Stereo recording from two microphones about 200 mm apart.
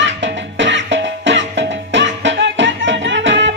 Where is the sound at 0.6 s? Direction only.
65° right (ahead or behind).